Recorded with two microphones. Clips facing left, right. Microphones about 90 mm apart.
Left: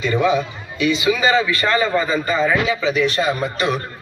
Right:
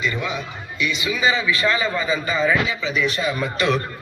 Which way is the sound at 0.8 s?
90° left.